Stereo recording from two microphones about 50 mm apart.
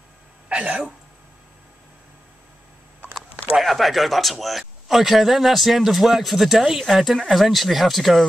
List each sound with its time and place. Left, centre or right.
0.5 s speech: right
3.5 s speech: centre